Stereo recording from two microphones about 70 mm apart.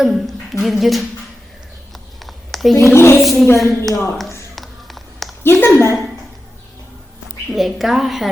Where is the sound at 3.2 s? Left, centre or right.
Centre.